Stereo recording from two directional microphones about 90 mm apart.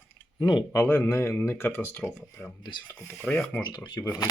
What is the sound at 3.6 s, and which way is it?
Speech, 55° left (ahead or behind).